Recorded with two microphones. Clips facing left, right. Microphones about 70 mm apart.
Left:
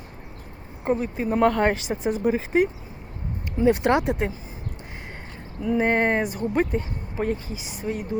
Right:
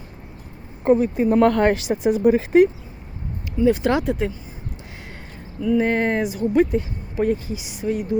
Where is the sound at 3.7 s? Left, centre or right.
Left.